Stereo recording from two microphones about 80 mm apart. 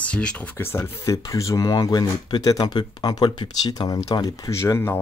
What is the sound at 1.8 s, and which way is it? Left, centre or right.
Speech, left.